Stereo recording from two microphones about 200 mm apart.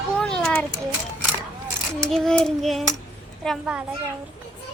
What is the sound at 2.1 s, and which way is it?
Speech, 5° left (ahead or behind).